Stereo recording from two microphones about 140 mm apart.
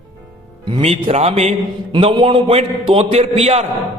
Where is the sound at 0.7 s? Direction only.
40° right (ahead or behind).